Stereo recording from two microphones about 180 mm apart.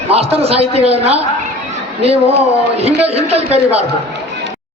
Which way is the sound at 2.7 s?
35° right (ahead or behind).